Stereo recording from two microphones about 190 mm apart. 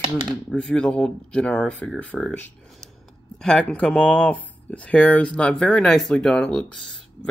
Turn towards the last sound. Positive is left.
turn(degrees=5)  # may be behind; listen again after turning